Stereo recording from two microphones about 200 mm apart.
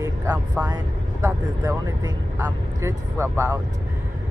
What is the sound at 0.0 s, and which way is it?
Speech, 15° right (ahead or behind).